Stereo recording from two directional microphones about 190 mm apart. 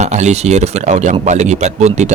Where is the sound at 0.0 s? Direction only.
35° right (ahead or behind).